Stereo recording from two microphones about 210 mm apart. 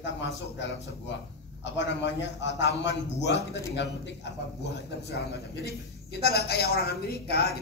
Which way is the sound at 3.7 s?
55° left (ahead or behind).